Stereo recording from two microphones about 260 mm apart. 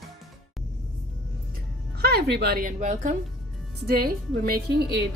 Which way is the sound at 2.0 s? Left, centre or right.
Right.